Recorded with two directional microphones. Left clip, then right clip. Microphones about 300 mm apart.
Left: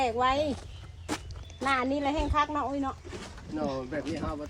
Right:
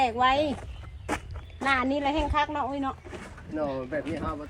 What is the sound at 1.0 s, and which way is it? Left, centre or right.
Walk, centre.